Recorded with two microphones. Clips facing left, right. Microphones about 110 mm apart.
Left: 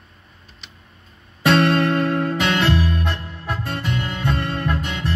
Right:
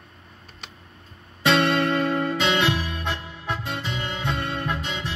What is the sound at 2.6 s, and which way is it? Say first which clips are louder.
Music: left 4 dB; 10° right (ahead or behind).